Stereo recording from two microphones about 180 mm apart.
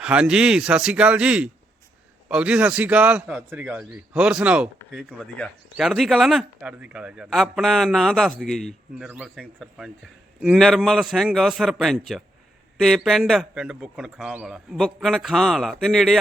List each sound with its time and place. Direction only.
0.0 s a man's voice: 5° right (ahead or behind)